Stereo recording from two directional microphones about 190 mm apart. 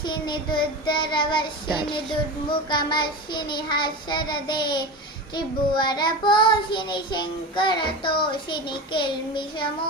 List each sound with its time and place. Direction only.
0.0 s child singing: 25° left (ahead or behind)